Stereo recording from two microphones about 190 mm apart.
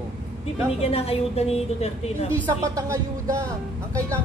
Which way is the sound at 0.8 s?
30° left (ahead or behind).